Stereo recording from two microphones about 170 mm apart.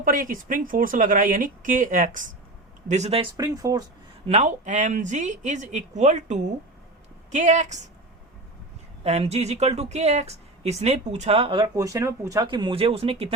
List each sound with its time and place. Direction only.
0.0 s speech: 55° right (ahead or behind)
2.9 s speech: 40° right (ahead or behind)
3.3 s speech: 20° right (ahead or behind)
4.3 s speech: 40° right (ahead or behind)
9.0 s speech: 40° right (ahead or behind)
11.7 s speech: 20° right (ahead or behind); by 13.3 s 35° right (ahead or behind)